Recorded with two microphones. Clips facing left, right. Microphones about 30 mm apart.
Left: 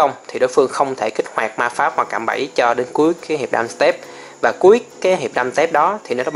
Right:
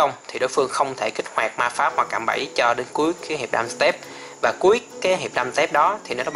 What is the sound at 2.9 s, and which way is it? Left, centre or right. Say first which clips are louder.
Speech: left 9 dB; right.